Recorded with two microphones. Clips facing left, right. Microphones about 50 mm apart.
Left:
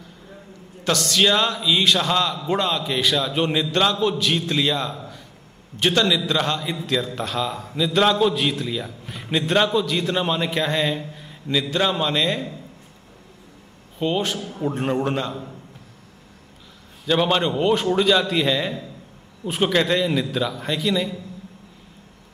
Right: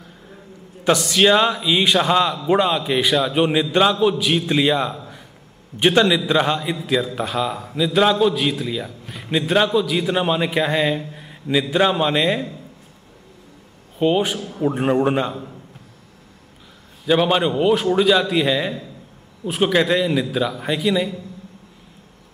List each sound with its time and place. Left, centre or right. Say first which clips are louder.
0.8 s a man's voice: right 4 dB; centre
13.9 s a man's voice: right 5 dB; centre
17.2 s a man's voice: right 1 dB; centre